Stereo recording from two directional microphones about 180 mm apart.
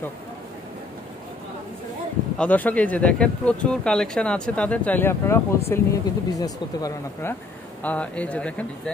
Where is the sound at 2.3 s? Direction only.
10° left (ahead or behind).